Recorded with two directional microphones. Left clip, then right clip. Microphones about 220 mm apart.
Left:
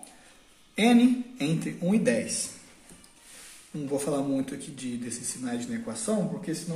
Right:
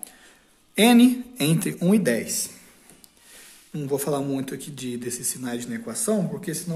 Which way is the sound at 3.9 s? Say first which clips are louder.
Right 3 dB; 50° right (ahead or behind).